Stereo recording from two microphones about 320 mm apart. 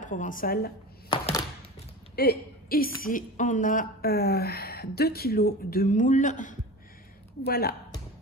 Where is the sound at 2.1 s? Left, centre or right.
Left.